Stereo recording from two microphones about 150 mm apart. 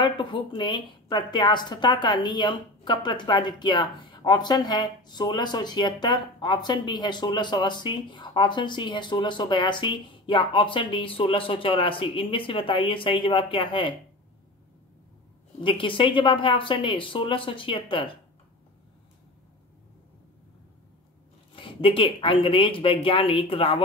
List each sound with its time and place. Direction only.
0.0 s a woman's voice: 30° left (ahead or behind)
15.6 s a woman's voice: 35° left (ahead or behind)
21.5 s a woman's voice: 35° left (ahead or behind)